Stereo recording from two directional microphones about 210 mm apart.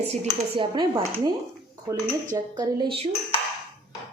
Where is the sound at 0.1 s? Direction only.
25° right (ahead or behind).